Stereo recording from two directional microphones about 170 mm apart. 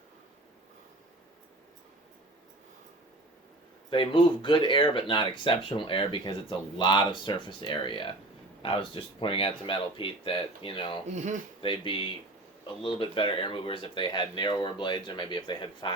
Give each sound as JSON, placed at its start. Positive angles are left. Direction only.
{"t": 3.8, "sound": "speech", "side_deg": 30}
{"t": 11.1, "sound": "speech", "side_deg": -45}
{"t": 11.6, "sound": "speech", "side_deg": 30}